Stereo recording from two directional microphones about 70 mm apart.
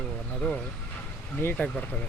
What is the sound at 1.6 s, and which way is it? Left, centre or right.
Speech, left.